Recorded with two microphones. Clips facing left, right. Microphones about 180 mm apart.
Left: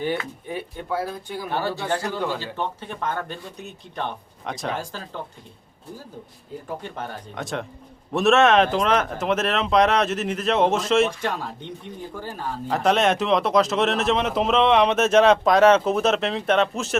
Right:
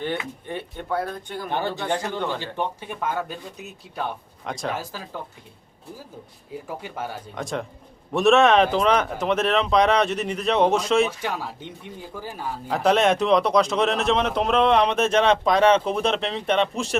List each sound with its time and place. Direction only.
0.4 s speech: 5° left (ahead or behind)
1.5 s a man's voice: 20° right (ahead or behind)
2.1 s speech: 5° left (ahead or behind)
2.4 s speech: 15° right (ahead or behind)
6.5 s speech: 10° right (ahead or behind)